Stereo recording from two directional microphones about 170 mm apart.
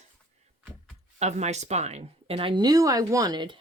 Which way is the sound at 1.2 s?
40° right (ahead or behind).